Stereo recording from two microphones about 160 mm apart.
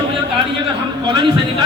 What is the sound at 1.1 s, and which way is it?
Speech, 30° right (ahead or behind).